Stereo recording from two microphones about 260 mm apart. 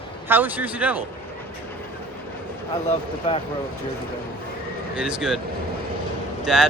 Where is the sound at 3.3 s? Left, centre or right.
Left.